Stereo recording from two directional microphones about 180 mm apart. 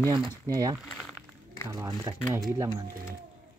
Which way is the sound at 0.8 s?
5° left (ahead or behind).